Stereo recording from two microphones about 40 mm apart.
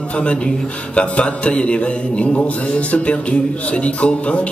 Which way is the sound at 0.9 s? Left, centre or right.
Left.